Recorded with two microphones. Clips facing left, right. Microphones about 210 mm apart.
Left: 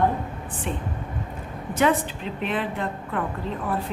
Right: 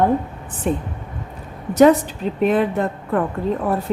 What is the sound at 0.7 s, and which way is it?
A woman's voice, 45° right (ahead or behind).